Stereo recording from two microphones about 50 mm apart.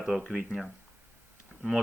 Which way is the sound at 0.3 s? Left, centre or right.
Centre.